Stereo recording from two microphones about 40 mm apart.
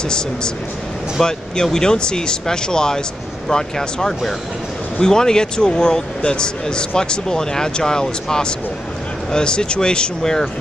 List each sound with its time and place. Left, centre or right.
1.2 s speech: centre